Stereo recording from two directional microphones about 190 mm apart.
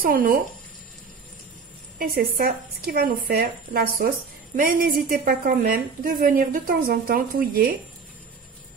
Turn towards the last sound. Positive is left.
turn(degrees=-50)  # may be behind; listen again after turning